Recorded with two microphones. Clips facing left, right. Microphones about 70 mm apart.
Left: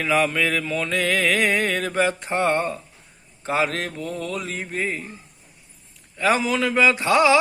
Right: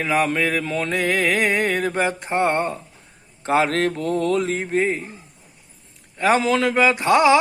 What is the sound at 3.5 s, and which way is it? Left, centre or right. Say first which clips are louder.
Speech: right 5 dB; right.